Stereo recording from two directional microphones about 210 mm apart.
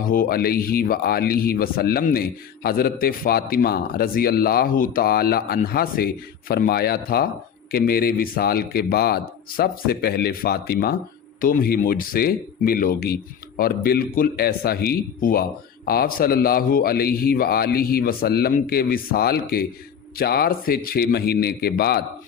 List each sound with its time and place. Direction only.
0.0 s speech: 40° left (ahead or behind)